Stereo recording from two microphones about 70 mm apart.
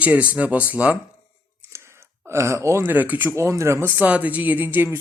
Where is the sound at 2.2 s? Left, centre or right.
Right.